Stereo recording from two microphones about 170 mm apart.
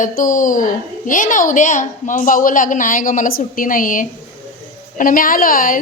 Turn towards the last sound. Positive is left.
turn(degrees=55)  # may be behind; listen again after turning